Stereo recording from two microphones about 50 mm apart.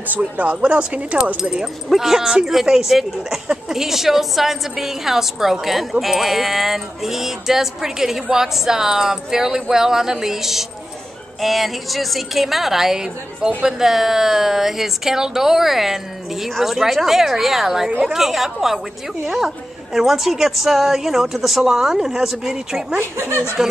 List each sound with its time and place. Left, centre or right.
0.1 s speech: right
1.3 s a woman's voice: centre
22.9 s speech: right